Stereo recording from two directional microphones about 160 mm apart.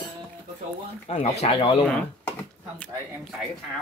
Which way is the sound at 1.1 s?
40° left (ahead or behind).